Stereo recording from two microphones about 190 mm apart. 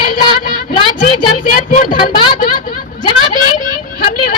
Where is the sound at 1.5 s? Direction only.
45° left (ahead or behind).